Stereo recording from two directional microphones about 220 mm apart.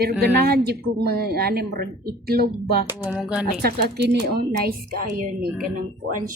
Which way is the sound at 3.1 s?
5° right (ahead or behind).